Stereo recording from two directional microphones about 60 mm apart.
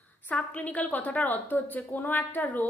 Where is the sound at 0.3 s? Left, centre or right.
Left.